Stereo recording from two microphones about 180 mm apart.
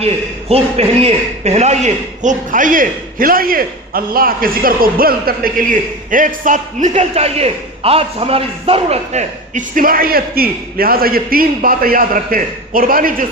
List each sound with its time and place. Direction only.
0.0 s a man's voice: 35° right (ahead or behind); by 13.2 s 50° right (ahead or behind)